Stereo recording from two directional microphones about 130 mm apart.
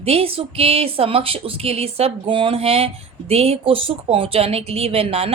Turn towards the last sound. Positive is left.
turn(degrees=-45)  # may be behind; listen again after turning